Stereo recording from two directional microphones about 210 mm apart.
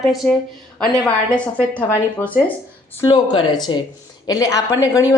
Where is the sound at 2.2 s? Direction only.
10° left (ahead or behind).